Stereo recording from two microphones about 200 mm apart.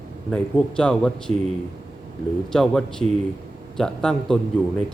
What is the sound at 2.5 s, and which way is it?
A man's voice, centre (ahead or behind).